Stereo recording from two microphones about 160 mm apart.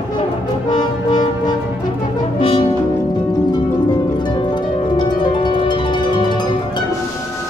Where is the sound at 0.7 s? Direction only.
25° left (ahead or behind).